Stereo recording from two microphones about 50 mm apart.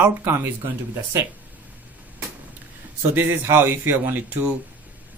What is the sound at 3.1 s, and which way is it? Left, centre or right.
Speech, right.